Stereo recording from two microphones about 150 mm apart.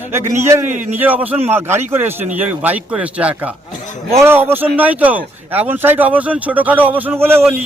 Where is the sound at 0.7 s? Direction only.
55° right (ahead or behind).